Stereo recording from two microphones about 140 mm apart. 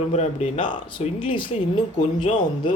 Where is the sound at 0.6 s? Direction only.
35° left (ahead or behind).